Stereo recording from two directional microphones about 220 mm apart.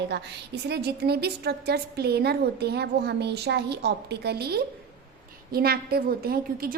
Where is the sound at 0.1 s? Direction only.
50° right (ahead or behind).